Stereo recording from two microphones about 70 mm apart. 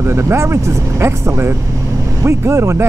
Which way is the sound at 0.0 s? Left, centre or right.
Right.